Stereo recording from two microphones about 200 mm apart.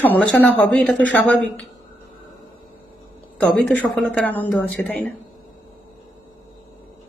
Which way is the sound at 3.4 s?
5° left (ahead or behind).